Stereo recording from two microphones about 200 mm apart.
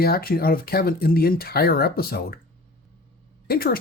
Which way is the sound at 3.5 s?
50° left (ahead or behind).